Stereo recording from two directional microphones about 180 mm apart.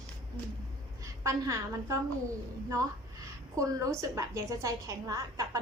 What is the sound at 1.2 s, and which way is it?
Speech, 15° right (ahead or behind).